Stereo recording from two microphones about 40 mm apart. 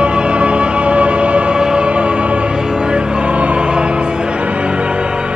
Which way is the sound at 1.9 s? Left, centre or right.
Right.